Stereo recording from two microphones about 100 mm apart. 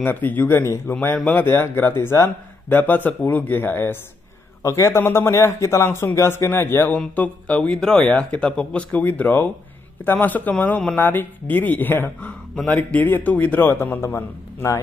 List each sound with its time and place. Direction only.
0.0 s a man's voice: 20° left (ahead or behind)
7.0 s a man's voice: 10° left (ahead or behind); by 14.8 s 30° left (ahead or behind)